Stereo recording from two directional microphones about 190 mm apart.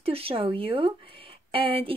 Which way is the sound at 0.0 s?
30° right (ahead or behind).